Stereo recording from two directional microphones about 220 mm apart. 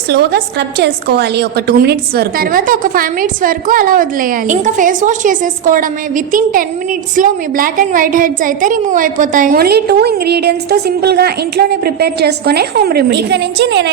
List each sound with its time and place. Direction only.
0.1 s a woman's voice: 45° right (ahead or behind)